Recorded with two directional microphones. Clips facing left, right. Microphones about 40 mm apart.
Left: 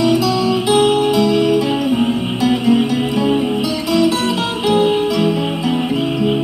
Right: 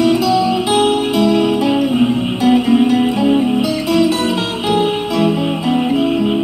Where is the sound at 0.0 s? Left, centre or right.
Right.